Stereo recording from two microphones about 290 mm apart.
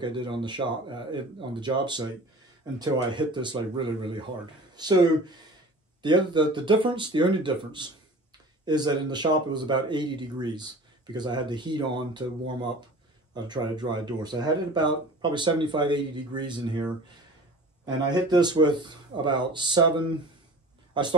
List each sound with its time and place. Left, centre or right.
0.0 s speech: centre
17.8 s speech: centre